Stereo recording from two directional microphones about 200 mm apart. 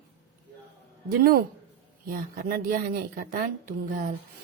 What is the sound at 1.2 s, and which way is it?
A woman's voice, 50° right (ahead or behind).